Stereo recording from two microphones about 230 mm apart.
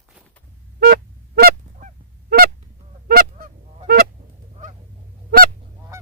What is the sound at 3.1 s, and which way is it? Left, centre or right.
Goose, right.